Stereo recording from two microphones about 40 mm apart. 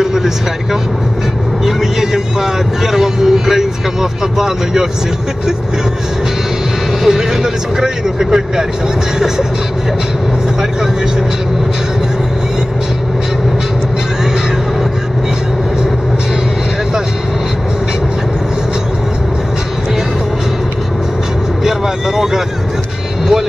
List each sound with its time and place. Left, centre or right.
0.0 s vehicle: centre
2.0 s speech: centre
7.0 s speech: centre
21.6 s speech: centre